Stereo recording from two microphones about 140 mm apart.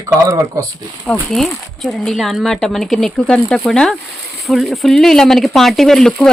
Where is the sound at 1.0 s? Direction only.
5° left (ahead or behind).